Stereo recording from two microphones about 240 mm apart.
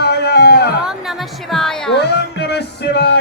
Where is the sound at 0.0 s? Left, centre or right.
Left.